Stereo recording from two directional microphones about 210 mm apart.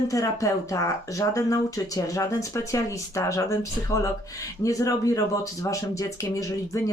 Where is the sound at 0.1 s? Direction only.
15° left (ahead or behind).